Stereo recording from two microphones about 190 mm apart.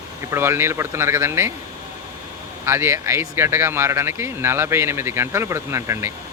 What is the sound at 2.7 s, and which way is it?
Speech, 15° right (ahead or behind).